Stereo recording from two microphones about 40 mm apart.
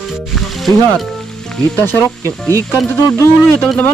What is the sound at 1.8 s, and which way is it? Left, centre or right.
Speech, left.